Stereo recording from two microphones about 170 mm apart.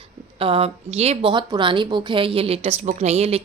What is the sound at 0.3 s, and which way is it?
Speech, 35° right (ahead or behind).